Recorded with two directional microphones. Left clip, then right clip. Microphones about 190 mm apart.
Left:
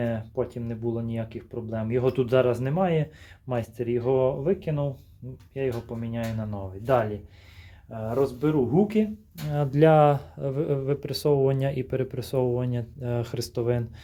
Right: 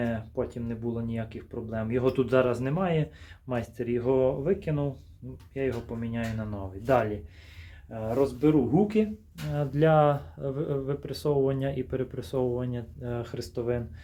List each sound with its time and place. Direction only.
0.0 s speech: 25° left (ahead or behind)
8.0 s speech: 20° left (ahead or behind)
9.5 s speech: 40° left (ahead or behind)